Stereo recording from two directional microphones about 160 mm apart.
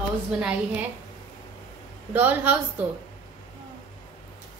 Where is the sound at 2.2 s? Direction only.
10° right (ahead or behind).